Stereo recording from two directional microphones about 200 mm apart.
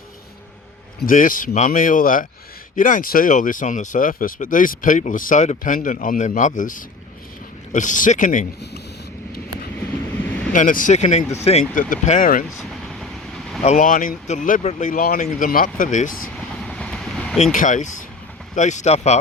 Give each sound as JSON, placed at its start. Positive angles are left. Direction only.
{"t": 0.9, "sound": "speech", "side_deg": 45}
{"t": 10.2, "sound": "vehicle", "side_deg": 10}
{"t": 10.5, "sound": "speech", "side_deg": 40}
{"t": 12.5, "sound": "vehicle", "side_deg": 0}
{"t": 13.6, "sound": "speech", "side_deg": 40}
{"t": 16.6, "sound": "vehicle", "side_deg": 5}
{"t": 17.4, "sound": "speech", "side_deg": 40}